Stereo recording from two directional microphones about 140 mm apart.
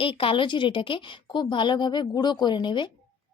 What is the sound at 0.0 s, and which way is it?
Speech, 40° left (ahead or behind).